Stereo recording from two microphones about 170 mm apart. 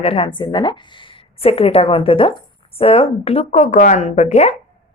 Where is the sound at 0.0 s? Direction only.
35° left (ahead or behind).